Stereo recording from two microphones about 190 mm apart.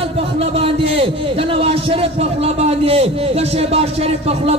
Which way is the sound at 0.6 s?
30° right (ahead or behind).